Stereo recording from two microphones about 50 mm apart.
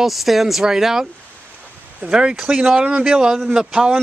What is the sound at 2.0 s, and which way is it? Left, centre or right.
A man's voice, centre.